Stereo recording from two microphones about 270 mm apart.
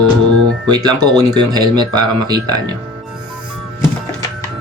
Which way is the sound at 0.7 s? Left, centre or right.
Centre.